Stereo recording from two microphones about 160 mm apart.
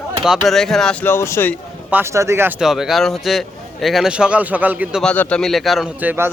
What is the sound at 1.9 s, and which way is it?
Speech, 15° right (ahead or behind).